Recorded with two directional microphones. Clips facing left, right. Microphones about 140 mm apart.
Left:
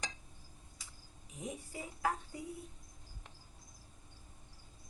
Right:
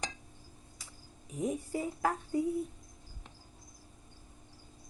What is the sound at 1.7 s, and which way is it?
Speech, 45° right (ahead or behind).